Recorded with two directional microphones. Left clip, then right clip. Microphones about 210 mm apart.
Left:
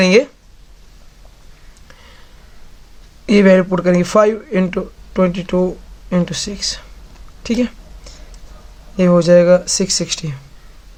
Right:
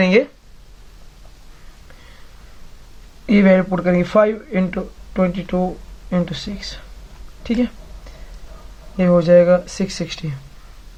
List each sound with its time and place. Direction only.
0.0 s speech: 30° left (ahead or behind)
3.2 s speech: 35° left (ahead or behind)
9.0 s speech: 35° left (ahead or behind)